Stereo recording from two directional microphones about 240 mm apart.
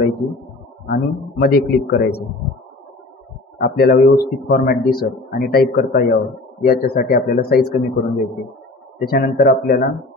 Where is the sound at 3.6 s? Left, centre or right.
Left.